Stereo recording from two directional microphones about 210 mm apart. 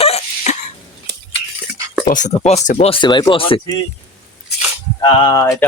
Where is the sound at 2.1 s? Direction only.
35° left (ahead or behind).